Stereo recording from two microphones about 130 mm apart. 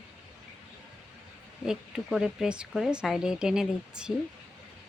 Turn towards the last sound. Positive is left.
turn(degrees=-5)  # may be behind; listen again after turning